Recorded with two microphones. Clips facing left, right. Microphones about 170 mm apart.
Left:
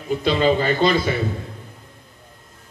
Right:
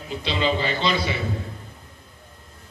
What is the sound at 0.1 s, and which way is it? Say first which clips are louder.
A man's voice: left 6 dB; 45° left (ahead or behind).